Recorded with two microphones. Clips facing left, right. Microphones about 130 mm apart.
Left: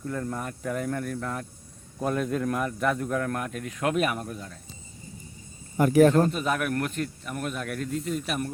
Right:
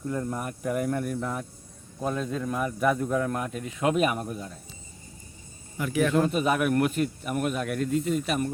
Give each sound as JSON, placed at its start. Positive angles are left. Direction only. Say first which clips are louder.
{"t": 0.0, "sound": "speech", "louder": "right 1 dB", "side_deg": -15}
{"t": 2.0, "sound": "a man's voice", "louder": "left 2 dB", "side_deg": 5}
{"t": 5.7, "sound": "speech", "louder": "left 6 dB", "side_deg": 45}
{"t": 6.3, "sound": "a man's voice", "louder": "right 4 dB", "side_deg": -5}